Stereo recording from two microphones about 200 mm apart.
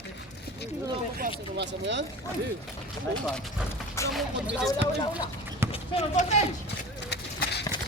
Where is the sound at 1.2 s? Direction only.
60° right (ahead or behind).